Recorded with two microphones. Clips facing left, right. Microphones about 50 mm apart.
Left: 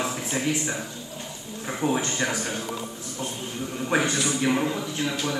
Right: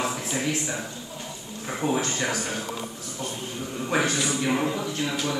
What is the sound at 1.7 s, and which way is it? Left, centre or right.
Speech, centre.